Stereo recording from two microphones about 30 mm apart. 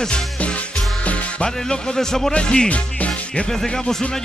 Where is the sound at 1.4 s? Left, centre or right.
Left.